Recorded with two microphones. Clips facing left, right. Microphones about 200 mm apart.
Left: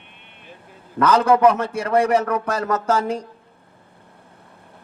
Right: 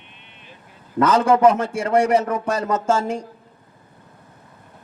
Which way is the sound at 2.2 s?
25° right (ahead or behind).